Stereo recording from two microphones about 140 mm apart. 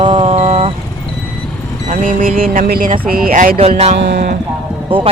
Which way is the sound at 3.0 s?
90° right.